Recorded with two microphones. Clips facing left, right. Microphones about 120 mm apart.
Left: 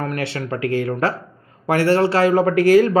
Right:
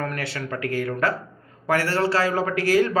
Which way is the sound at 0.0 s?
25° left (ahead or behind).